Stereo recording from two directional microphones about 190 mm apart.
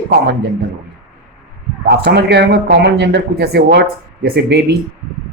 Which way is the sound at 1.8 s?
55° right (ahead or behind).